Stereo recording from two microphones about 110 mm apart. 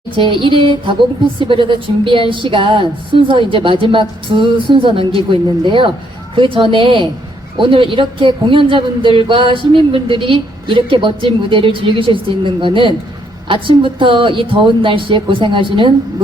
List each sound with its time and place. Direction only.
0.2 s speech: 50° right (ahead or behind)